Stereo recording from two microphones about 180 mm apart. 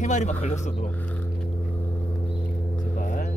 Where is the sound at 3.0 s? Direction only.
45° left (ahead or behind).